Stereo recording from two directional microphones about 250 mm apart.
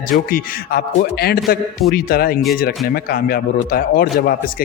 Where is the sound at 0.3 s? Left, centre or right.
Left.